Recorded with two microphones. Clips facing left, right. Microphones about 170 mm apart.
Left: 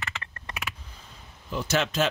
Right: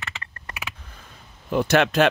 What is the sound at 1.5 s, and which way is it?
Speech, 60° right (ahead or behind).